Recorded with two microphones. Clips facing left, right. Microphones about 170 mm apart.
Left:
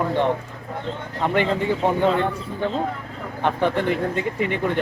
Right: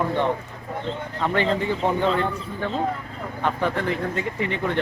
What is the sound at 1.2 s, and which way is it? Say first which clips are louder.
Speech: left 2 dB; 15° left (ahead or behind).